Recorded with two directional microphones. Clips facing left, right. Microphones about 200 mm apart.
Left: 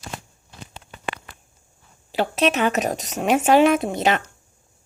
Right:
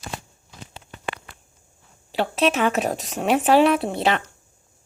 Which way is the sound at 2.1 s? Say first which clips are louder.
Even; centre (ahead or behind).